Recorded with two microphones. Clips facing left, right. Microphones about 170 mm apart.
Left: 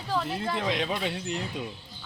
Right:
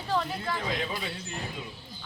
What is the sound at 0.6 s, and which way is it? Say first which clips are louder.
Speech: left 4 dB; 80° left.